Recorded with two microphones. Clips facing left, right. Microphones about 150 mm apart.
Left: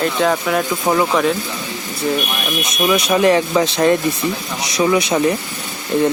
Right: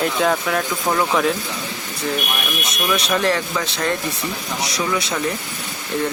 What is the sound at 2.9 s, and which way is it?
Speech, 10° left (ahead or behind).